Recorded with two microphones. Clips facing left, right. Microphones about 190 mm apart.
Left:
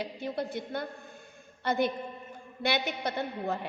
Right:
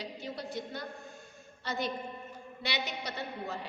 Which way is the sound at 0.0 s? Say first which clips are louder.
Left 6 dB; 55° left (ahead or behind).